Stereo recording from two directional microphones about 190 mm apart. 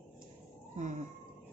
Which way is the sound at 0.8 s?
40° right (ahead or behind).